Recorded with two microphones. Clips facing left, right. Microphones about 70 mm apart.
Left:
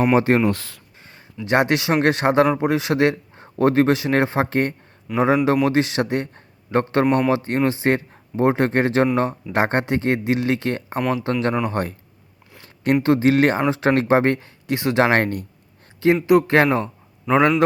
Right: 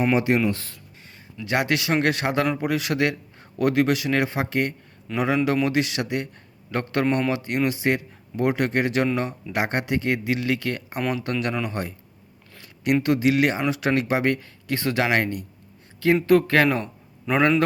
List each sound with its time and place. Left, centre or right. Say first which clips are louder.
0.1 s speech: left 4 dB; left
0.5 s speech: left 3 dB; left
1.0 s speech: left 4 dB; left
11.7 s speech: left 6 dB; left
15.0 s speech: left 5 dB; left
16.0 s a man's voice: left 2 dB; left